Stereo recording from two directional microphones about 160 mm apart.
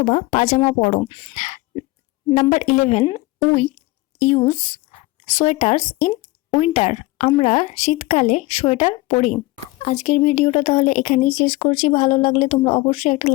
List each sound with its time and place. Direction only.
0.0 s speech: 50° left (ahead or behind)
1.0 s speech: 30° left (ahead or behind)
1.4 s a sound: 50° left (ahead or behind)
2.3 s speech: 50° left (ahead or behind)
4.2 s speech: 40° left (ahead or behind)